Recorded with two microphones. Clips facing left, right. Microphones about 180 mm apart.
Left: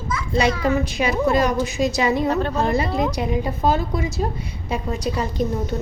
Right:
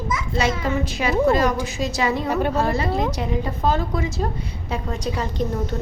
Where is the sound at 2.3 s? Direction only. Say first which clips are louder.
Even; 10° right (ahead or behind).